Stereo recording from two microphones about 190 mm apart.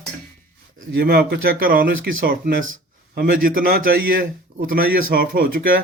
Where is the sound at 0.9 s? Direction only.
55° right (ahead or behind).